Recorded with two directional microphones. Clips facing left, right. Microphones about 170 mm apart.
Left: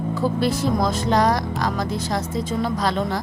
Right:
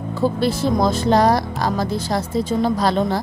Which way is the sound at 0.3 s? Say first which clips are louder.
Right 1 dB; 30° right (ahead or behind).